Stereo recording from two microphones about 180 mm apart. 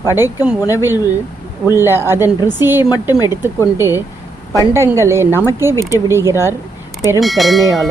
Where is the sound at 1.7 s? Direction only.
15° right (ahead or behind).